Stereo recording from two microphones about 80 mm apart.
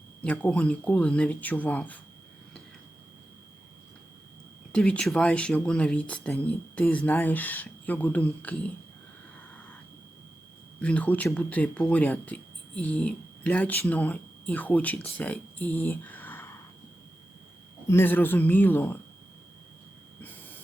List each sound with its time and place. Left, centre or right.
0.3 s speech: centre
4.7 s speech: centre
10.8 s speech: centre
17.8 s speech: left
20.2 s a sound: left